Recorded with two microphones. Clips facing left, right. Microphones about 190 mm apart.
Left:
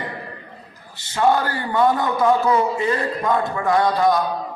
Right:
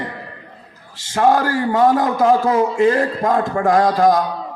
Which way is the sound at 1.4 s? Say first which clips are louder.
Right 4 dB; 90° right.